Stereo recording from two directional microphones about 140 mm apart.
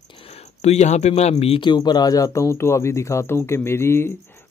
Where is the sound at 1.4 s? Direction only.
40° left (ahead or behind); by 4.1 s 20° left (ahead or behind).